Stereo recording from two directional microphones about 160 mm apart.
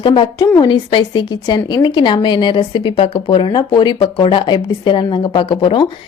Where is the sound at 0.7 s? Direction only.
30° left (ahead or behind).